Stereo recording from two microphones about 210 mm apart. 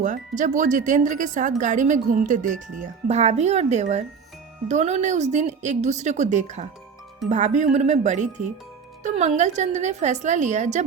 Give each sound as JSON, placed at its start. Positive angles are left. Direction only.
{"t": 0.0, "sound": "speech", "side_deg": -35}